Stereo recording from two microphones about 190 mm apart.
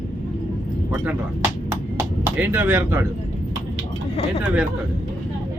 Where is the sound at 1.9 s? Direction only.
10° right (ahead or behind).